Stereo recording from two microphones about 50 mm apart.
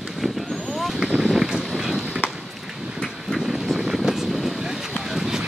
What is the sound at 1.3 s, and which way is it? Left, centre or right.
Run, centre.